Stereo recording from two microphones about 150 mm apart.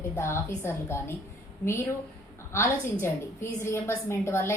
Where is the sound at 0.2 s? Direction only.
15° left (ahead or behind).